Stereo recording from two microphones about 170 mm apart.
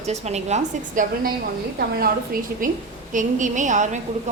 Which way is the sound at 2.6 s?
55° right (ahead or behind).